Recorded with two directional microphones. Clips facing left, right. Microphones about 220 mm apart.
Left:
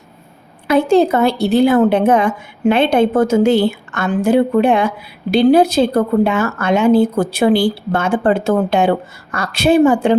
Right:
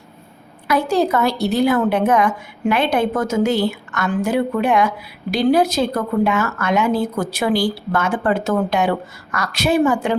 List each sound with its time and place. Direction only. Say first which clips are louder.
0.7 s speech: left 5 dB; 25° left (ahead or behind)